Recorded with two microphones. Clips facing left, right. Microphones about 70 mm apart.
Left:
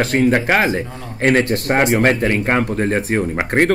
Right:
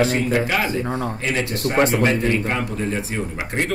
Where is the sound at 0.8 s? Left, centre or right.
Right.